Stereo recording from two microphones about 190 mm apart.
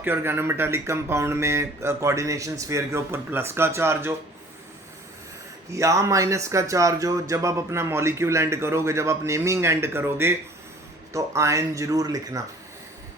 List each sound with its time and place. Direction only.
0.0 s speech: 10° right (ahead or behind)
5.7 s speech: 15° right (ahead or behind)